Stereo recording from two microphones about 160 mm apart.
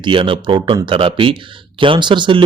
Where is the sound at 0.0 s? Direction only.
30° right (ahead or behind).